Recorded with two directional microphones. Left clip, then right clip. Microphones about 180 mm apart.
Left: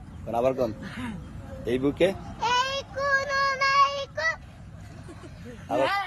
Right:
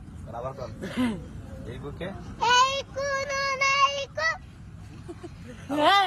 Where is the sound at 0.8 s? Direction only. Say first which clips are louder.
Right 7 dB; 35° right (ahead or behind).